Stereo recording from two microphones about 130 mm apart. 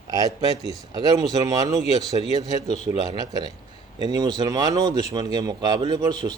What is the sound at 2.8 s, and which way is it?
Speech, 30° right (ahead or behind).